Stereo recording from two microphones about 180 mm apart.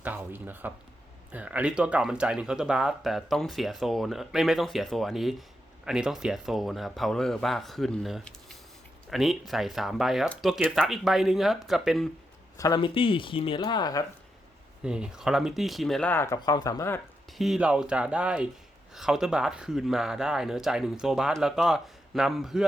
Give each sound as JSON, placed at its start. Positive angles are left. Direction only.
{"t": 0.0, "sound": "speech", "side_deg": -10}
{"t": 12.5, "sound": "speech", "side_deg": 20}
{"t": 14.8, "sound": "speech", "side_deg": -5}
{"t": 17.3, "sound": "speech", "side_deg": 0}